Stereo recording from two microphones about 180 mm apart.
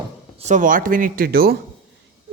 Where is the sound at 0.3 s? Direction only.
40° right (ahead or behind).